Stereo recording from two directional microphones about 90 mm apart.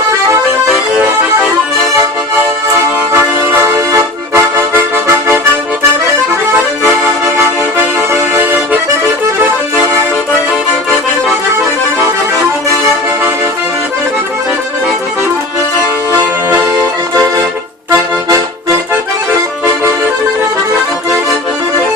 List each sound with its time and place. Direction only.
3.1 s accordion: 30° right (ahead or behind)
7.3 s accordion: 25° right (ahead or behind)